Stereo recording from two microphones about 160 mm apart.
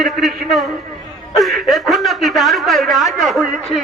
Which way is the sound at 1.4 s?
Centre (ahead or behind).